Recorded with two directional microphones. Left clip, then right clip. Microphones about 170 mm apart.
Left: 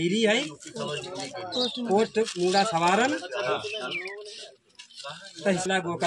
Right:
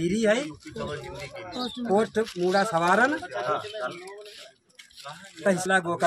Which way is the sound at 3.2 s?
25° right (ahead or behind).